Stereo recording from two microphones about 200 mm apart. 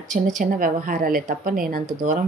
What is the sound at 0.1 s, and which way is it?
A woman's voice, 40° right (ahead or behind).